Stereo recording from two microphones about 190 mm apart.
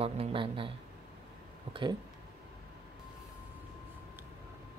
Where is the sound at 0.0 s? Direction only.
30° right (ahead or behind).